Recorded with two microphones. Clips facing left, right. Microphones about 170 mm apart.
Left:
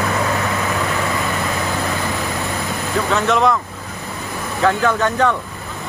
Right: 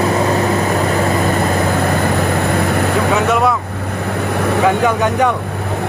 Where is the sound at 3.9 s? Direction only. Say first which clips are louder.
Right 10 dB; 70° right (ahead or behind).